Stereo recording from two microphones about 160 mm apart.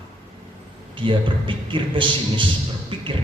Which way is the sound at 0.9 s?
30° right (ahead or behind).